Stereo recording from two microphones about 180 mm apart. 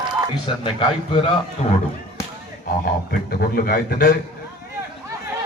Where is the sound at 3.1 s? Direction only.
55° left (ahead or behind).